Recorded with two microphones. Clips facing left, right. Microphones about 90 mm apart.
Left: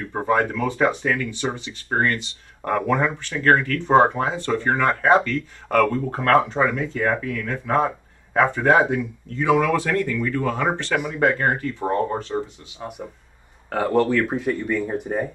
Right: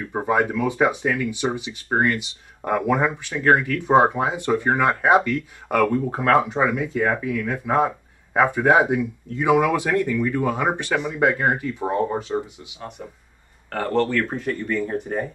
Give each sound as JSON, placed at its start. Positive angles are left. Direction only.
{"t": 0.1, "sound": "speech", "side_deg": -10}
{"t": 13.7, "sound": "speech", "side_deg": 10}